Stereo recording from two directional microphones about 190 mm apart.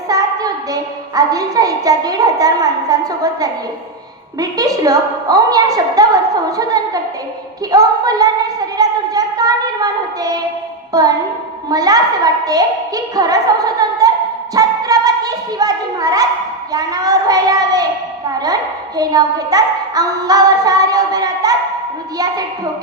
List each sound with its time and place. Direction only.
0.1 s a woman's voice: 20° right (ahead or behind)
4.4 s a woman's voice: 20° right (ahead or behind)
14.5 s a sound: 20° right (ahead or behind)
16.7 s a woman's voice: 20° right (ahead or behind)
18.9 s a woman's voice: 20° right (ahead or behind)